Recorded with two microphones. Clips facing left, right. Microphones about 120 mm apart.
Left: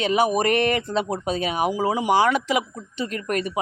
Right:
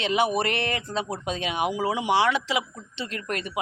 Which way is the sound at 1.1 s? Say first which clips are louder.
Left 4 dB; 40° left (ahead or behind).